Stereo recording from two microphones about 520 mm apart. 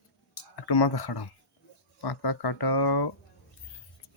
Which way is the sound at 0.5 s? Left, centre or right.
Left.